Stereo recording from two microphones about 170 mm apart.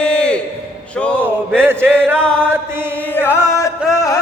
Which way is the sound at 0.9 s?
5° left (ahead or behind).